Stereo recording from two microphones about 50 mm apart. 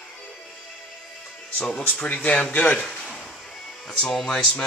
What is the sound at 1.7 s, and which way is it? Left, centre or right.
Speech, left.